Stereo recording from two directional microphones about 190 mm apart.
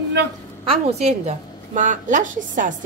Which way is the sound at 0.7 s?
35° right (ahead or behind).